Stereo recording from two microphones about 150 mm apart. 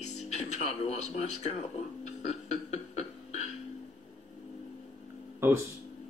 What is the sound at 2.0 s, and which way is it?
Beatboxing, 50° left (ahead or behind).